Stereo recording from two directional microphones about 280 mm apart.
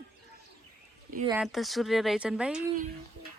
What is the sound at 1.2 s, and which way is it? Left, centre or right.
Speech, centre.